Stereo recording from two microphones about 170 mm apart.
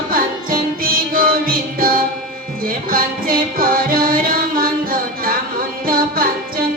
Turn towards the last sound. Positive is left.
turn(degrees=-55)  # may be behind; listen again after turning